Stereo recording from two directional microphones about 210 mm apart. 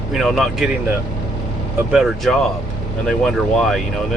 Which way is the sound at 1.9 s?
5° right (ahead or behind).